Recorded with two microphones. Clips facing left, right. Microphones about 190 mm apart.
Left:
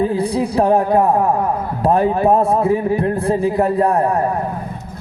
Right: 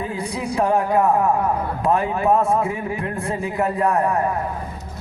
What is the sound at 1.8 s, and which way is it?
A man's voice, 35° left (ahead or behind).